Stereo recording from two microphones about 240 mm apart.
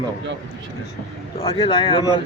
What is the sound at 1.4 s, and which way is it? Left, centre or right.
Speech, centre.